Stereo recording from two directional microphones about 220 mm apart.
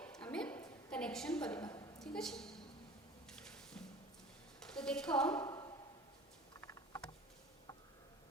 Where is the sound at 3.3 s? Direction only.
5° left (ahead or behind).